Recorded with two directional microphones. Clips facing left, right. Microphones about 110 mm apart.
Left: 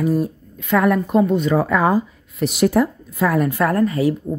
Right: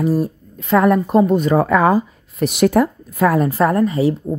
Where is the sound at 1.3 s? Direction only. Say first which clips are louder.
Right 3 dB; 45° right (ahead or behind).